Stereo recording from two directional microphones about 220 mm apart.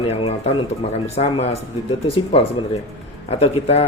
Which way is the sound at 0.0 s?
25° left (ahead or behind).